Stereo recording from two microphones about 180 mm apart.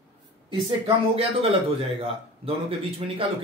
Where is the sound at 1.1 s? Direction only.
35° right (ahead or behind).